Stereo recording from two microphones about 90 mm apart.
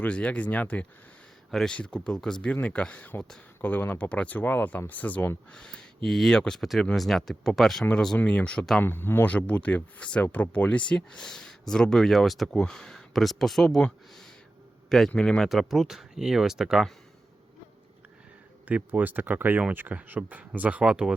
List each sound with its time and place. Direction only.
0.0 s speech: 15° left (ahead or behind)
1.5 s speech: 5° left (ahead or behind); by 5.4 s 20° left (ahead or behind)
5.5 s speech: 10° left (ahead or behind)
8.2 s speech: 15° left (ahead or behind)
8.8 s a man's voice: 25° left (ahead or behind); by 16.9 s 5° right (ahead or behind)
18.6 s speech: 20° right (ahead or behind)